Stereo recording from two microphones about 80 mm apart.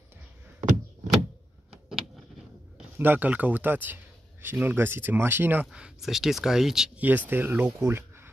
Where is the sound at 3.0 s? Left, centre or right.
Right.